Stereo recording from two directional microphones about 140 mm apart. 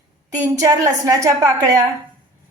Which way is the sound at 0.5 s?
25° right (ahead or behind).